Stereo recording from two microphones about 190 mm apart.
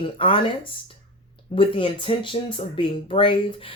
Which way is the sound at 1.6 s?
25° left (ahead or behind).